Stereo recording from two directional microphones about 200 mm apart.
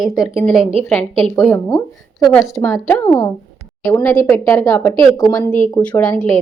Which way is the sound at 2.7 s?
15° left (ahead or behind).